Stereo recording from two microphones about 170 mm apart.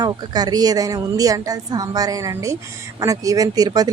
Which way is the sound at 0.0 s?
25° right (ahead or behind).